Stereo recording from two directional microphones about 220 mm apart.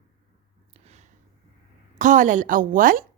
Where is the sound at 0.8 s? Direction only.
30° right (ahead or behind).